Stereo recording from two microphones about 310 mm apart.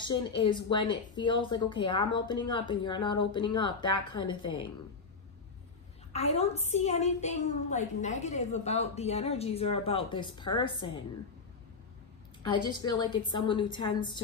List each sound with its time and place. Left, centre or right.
0.0 s a woman's voice: centre
3.9 s a woman's voice: left
6.1 s a woman's voice: centre
12.6 s a woman's voice: centre